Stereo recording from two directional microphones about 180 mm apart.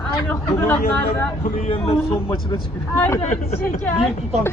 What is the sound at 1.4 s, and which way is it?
Speech, 40° left (ahead or behind).